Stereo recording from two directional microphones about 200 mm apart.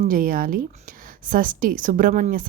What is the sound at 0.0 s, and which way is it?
A woman's voice, 45° right (ahead or behind).